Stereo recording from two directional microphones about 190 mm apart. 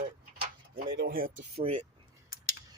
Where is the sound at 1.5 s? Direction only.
30° right (ahead or behind).